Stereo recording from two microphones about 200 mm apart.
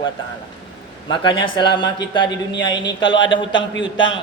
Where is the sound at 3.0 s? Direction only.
65° left (ahead or behind).